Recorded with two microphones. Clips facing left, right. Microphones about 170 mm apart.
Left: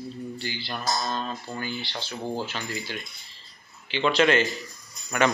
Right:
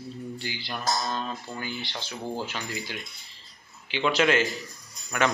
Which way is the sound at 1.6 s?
15° right (ahead or behind).